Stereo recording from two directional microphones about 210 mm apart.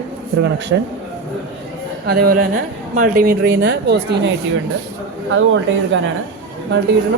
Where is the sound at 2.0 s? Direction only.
45° right (ahead or behind).